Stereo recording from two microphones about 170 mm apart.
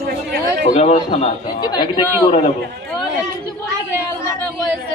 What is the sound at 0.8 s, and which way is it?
A man's voice, 35° left (ahead or behind).